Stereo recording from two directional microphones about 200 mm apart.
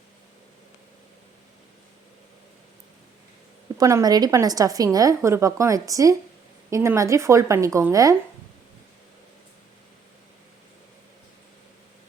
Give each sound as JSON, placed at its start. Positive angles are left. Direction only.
{"t": 3.8, "sound": "a woman's voice", "side_deg": -15}